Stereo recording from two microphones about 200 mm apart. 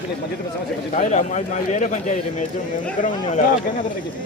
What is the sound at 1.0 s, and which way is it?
Speech, 35° left (ahead or behind).